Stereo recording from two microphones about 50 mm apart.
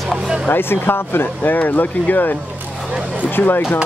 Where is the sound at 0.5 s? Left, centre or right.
Left.